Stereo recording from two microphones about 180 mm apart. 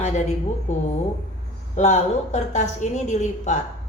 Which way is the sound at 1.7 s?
40° left (ahead or behind).